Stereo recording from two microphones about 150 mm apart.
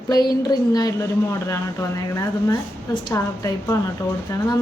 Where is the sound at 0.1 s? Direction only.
25° left (ahead or behind).